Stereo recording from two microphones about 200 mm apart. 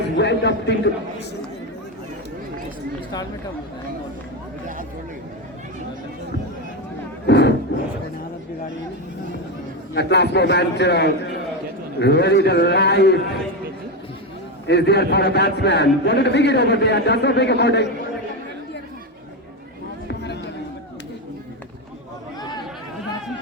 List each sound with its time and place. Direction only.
0.2 s a man's voice: 60° left (ahead or behind)
7.3 s a sound: 60° left (ahead or behind)
9.9 s a man's voice: 55° left (ahead or behind)
14.7 s a man's voice: 55° left (ahead or behind)
20.1 s a sound: 55° left (ahead or behind)
22.4 s chatter: 20° left (ahead or behind)